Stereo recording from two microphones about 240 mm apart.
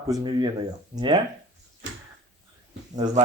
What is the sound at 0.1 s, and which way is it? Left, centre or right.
Speech, centre.